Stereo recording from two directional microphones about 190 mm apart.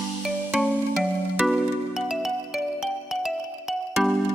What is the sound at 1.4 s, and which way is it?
Music, centre (ahead or behind).